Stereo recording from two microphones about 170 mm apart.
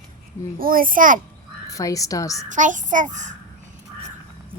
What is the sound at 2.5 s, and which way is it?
Speech, 50° right (ahead or behind).